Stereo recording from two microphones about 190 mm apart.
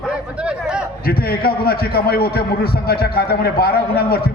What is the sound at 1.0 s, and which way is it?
A man's voice, 50° left (ahead or behind).